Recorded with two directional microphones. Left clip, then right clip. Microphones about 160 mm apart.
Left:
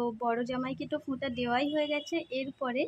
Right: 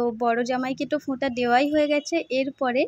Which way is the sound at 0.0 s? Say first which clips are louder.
Right 8 dB; 30° right (ahead or behind).